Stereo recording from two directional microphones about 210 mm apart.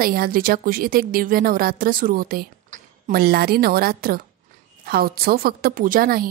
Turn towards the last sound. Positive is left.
turn(degrees=-45)  # may be behind; listen again after turning